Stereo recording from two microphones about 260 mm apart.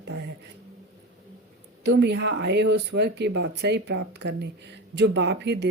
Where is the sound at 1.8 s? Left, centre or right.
Right.